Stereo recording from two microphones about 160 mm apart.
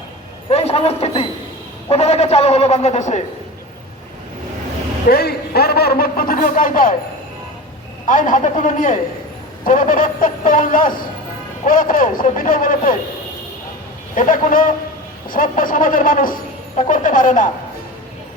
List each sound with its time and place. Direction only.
0.4 s a man's voice: 40° left (ahead or behind)
5.0 s a man's voice: 80° left; by 6.9 s 60° left (ahead or behind)
8.0 s speech: 55° left (ahead or behind)
14.2 s speech: 60° left (ahead or behind)